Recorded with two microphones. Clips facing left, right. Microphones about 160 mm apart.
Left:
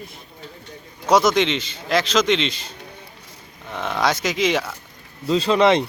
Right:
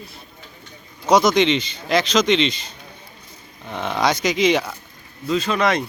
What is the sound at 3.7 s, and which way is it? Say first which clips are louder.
Speech: right 1 dB; centre (ahead or behind).